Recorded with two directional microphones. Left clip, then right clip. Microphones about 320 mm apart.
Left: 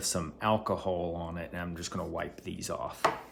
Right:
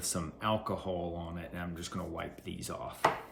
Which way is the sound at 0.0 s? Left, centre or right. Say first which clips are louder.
Left 4 dB; centre.